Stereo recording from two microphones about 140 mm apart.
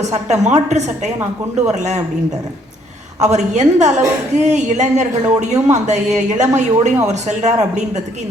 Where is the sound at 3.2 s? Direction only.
55° right (ahead or behind).